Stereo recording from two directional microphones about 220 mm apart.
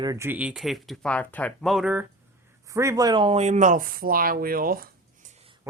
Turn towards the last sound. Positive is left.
turn(degrees=-30)  # may be behind; listen again after turning